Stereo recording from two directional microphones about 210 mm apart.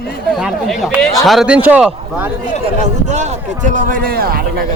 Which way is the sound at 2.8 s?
35° right (ahead or behind).